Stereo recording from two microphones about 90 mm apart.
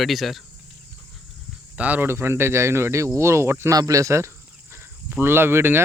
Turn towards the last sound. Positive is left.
turn(degrees=-25)  # may be behind; listen again after turning